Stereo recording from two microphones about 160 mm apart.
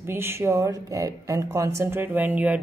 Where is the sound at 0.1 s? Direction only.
15° right (ahead or behind).